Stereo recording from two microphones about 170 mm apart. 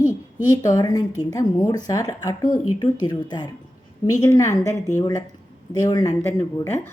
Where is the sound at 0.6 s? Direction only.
20° left (ahead or behind).